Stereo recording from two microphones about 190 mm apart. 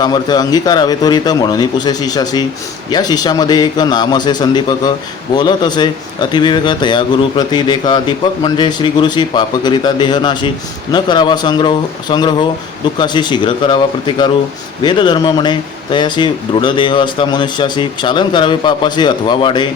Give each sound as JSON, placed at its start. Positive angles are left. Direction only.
{"t": 0.0, "sound": "a man's voice", "side_deg": 20}